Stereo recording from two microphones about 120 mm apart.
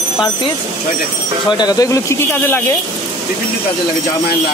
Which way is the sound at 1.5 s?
35° left (ahead or behind).